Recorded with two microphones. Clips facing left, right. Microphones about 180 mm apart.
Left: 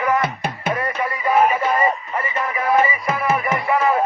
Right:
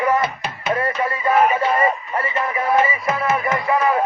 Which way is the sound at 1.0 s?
25° right (ahead or behind).